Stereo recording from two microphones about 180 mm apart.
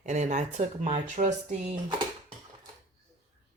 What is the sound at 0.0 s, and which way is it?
Speech, 40° right (ahead or behind).